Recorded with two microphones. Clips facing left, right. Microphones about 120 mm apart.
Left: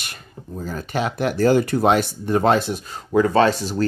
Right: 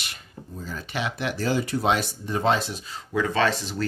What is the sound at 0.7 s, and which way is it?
Speech, 45° left (ahead or behind).